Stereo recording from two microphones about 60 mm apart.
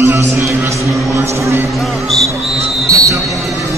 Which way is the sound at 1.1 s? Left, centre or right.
Right.